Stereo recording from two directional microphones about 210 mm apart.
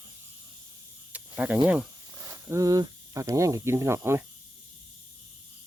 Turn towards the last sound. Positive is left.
turn(degrees=-10)  # may be behind; listen again after turning